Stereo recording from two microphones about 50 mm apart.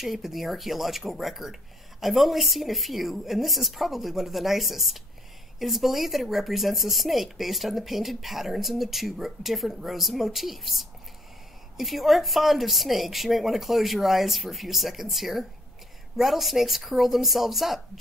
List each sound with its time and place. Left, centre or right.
0.0 s speech: centre